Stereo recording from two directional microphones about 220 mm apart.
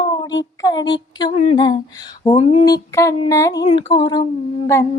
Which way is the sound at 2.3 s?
30° left (ahead or behind).